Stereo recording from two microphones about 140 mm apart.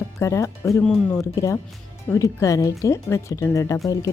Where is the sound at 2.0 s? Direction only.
20° left (ahead or behind).